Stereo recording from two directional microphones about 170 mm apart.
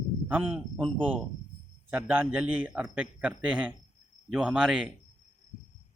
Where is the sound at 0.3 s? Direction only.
10° right (ahead or behind).